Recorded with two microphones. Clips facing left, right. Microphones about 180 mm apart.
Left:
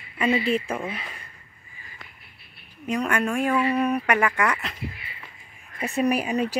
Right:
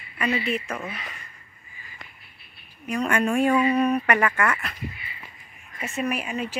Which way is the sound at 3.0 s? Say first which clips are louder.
Right 3 dB; centre (ahead or behind).